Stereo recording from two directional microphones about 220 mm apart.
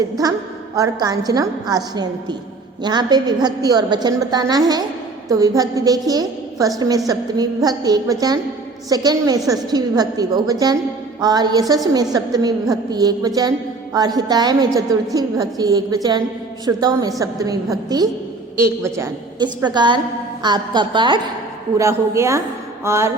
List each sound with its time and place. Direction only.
0.2 s a woman's voice: 15° right (ahead or behind)